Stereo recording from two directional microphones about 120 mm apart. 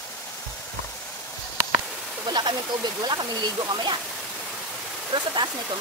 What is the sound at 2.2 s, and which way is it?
Speech, 40° right (ahead or behind).